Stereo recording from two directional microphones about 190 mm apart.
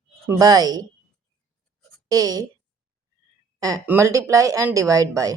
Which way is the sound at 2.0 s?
20° right (ahead or behind).